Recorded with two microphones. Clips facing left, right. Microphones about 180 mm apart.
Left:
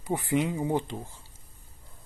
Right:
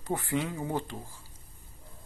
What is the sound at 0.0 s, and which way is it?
Speech, 15° left (ahead or behind).